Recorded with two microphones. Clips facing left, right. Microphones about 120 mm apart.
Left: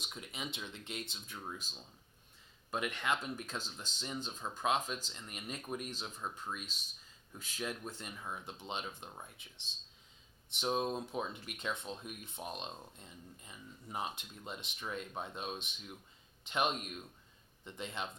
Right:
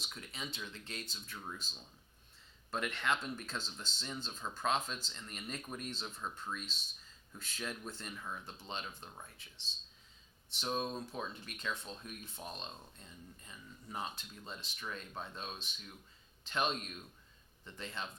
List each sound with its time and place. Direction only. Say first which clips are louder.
0.0 s speech: left 2 dB; 15° left (ahead or behind)
10.6 s speech: left 3 dB; 20° left (ahead or behind)